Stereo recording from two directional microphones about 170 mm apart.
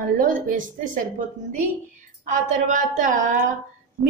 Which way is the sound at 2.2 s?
45° right (ahead or behind).